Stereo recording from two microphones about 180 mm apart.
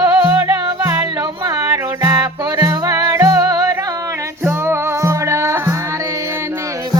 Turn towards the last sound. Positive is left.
turn(degrees=-15)  # may be behind; listen again after turning